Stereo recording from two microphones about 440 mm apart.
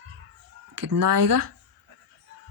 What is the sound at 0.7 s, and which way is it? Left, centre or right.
Speech, right.